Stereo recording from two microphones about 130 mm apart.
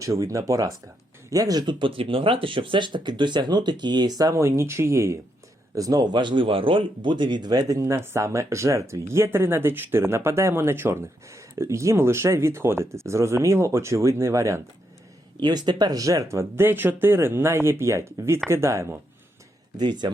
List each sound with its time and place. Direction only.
0.0 s speech: 25° right (ahead or behind)
4.2 s speech: 25° right (ahead or behind)
15.4 s speech: 35° right (ahead or behind)
19.7 s speech: 35° right (ahead or behind)